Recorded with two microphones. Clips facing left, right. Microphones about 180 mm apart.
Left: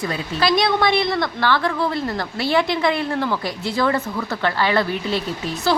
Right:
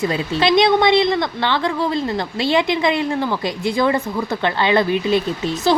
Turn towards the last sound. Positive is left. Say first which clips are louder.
# right 3 dB
turn(degrees=-20)  # may be behind; listen again after turning